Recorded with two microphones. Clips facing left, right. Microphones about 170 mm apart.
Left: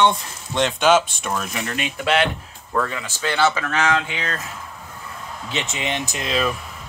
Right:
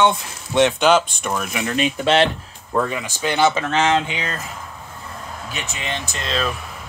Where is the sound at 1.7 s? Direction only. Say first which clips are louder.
Right 4 dB; 25° right (ahead or behind).